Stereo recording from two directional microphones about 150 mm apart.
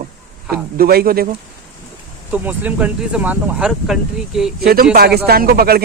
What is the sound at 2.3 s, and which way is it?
Speech, 10° right (ahead or behind).